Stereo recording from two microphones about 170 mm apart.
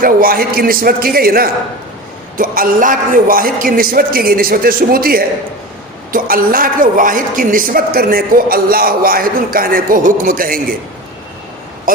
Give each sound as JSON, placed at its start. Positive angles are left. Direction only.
{"t": 0.0, "sound": "a woman's voice", "side_deg": -55}
{"t": 11.9, "sound": "a woman's voice", "side_deg": -55}